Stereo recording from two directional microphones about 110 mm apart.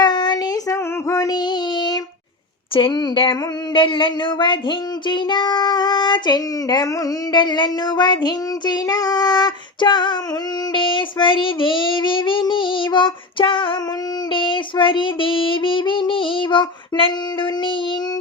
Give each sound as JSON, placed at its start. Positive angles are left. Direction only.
{"t": 0.0, "sound": "child singing", "side_deg": 40}
{"t": 0.7, "sound": "child singing", "side_deg": 30}